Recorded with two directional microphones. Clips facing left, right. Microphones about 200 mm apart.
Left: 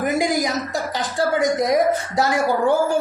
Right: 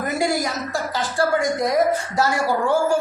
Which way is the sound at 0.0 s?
15° left (ahead or behind).